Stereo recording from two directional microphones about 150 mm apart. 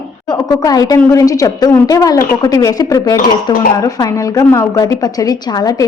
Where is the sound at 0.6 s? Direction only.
25° left (ahead or behind).